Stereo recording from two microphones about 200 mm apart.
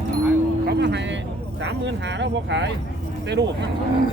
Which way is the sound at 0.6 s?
60° right (ahead or behind).